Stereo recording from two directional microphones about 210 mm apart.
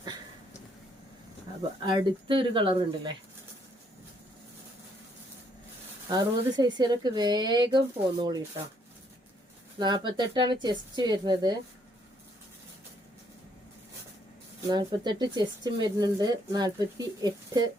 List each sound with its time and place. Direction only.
1.8 s speech: 25° right (ahead or behind)
6.1 s speech: 20° right (ahead or behind)
9.7 s speech: 20° right (ahead or behind)
14.7 s speech: 20° right (ahead or behind)